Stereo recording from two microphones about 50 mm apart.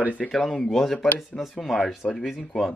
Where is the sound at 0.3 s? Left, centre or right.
Centre.